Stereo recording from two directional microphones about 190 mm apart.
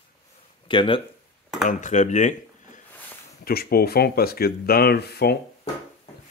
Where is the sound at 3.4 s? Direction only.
55° left (ahead or behind).